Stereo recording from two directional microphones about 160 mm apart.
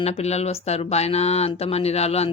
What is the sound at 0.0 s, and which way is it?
Speech, 40° left (ahead or behind).